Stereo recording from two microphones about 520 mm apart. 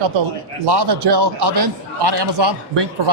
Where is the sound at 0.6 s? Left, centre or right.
Right.